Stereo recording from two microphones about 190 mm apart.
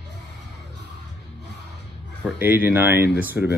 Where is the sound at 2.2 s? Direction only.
10° right (ahead or behind).